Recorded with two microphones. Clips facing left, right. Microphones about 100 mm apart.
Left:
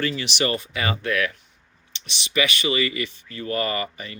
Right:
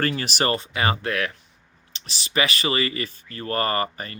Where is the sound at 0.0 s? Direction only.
50° right (ahead or behind).